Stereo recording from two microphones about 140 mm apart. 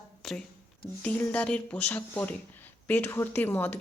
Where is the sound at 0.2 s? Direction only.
5° left (ahead or behind).